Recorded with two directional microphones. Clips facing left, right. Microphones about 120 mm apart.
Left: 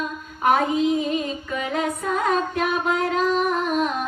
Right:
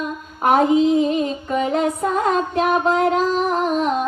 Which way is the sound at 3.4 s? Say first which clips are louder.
Right 3 dB; 30° right (ahead or behind).